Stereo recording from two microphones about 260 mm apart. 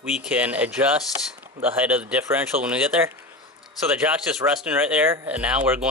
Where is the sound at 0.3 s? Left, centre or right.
Centre.